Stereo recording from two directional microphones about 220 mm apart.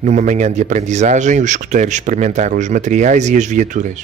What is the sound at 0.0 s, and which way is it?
Speech, 35° right (ahead or behind).